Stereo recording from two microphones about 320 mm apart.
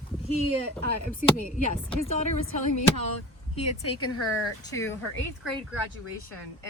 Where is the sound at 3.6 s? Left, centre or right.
Centre.